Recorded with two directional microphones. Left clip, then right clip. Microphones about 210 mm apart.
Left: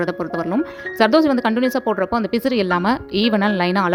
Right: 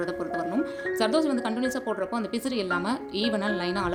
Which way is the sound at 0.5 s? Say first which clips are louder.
Left 6 dB; 40° left (ahead or behind).